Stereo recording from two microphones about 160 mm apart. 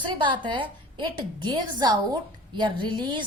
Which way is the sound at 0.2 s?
30° right (ahead or behind).